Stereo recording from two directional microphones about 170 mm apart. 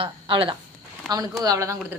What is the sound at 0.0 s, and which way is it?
Speech, 30° right (ahead or behind).